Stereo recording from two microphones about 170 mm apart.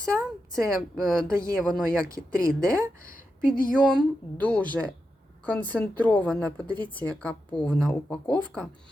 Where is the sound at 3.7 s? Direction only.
5° left (ahead or behind).